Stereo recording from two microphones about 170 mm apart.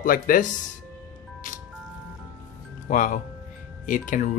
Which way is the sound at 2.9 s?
50° left (ahead or behind).